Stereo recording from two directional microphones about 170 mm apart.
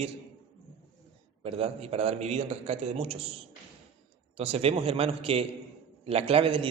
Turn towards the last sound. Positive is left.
turn(degrees=-30)  # may be behind; listen again after turning